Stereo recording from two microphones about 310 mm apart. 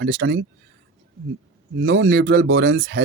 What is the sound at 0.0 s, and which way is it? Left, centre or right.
Speech, right.